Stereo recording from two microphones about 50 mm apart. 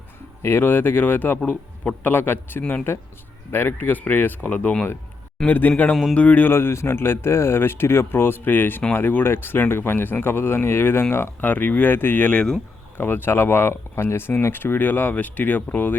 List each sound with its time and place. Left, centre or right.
0.4 s speech: left
6.5 s speech: left
11.3 s speech: left